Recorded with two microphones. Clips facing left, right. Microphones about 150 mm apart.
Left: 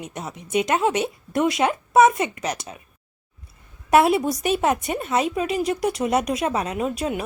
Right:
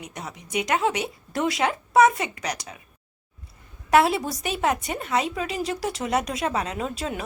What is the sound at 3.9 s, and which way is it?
A woman's voice, 20° left (ahead or behind).